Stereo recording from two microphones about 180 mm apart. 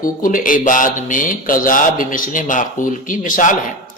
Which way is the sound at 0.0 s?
50° left (ahead or behind).